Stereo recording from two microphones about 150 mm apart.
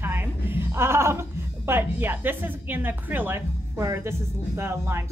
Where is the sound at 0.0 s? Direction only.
15° right (ahead or behind).